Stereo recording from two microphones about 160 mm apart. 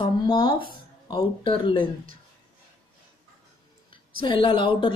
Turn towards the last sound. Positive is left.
turn(degrees=30)  # may be behind; listen again after turning